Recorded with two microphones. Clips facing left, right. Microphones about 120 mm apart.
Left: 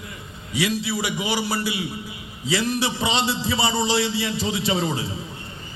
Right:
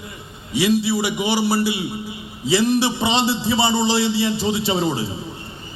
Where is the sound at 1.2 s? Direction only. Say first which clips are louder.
Right 6 dB; 30° right (ahead or behind).